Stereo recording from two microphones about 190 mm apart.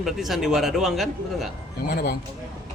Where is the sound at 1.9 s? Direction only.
55° left (ahead or behind).